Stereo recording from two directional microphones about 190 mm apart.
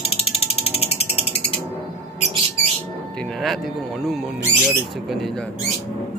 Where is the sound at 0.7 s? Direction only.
30° left (ahead or behind).